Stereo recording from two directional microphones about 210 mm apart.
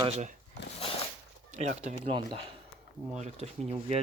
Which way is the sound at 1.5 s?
35° right (ahead or behind).